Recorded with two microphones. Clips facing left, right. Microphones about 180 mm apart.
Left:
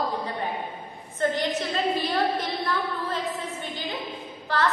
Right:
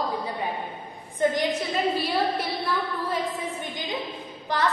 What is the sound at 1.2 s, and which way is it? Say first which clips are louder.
A woman's voice: right 2 dB; 15° right (ahead or behind).